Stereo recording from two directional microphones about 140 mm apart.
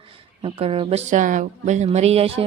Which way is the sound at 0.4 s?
45° right (ahead or behind).